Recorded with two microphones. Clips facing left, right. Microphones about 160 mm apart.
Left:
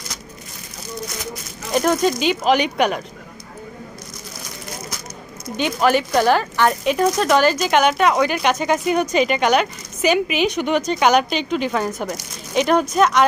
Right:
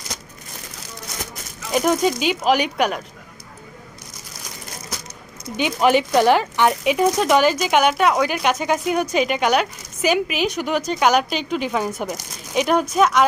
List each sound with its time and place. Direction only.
1.7 s speech: 10° right (ahead or behind)
5.5 s speech: 15° right (ahead or behind)